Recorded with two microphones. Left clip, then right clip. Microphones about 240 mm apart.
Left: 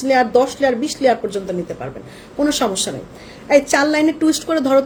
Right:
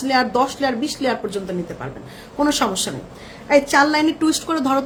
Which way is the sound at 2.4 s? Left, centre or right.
Right.